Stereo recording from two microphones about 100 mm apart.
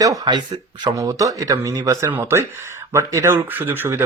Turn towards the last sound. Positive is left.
turn(degrees=-20)  # may be behind; listen again after turning